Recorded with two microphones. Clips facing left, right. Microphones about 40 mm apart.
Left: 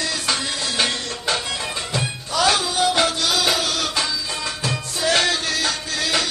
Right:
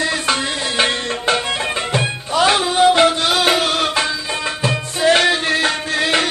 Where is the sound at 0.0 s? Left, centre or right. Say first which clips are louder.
Right 5 dB; right.